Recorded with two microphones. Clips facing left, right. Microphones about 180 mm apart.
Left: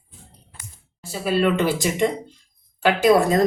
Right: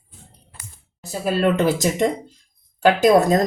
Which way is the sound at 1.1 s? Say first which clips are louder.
Right 1 dB; 45° right (ahead or behind).